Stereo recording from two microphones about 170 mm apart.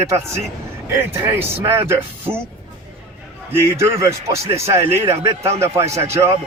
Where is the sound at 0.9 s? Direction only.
15° right (ahead or behind).